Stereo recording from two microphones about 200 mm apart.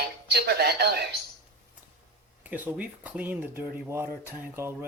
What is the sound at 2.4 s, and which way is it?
Speech, 10° right (ahead or behind).